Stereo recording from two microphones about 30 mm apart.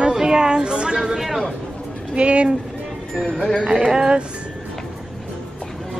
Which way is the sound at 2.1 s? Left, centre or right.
Right.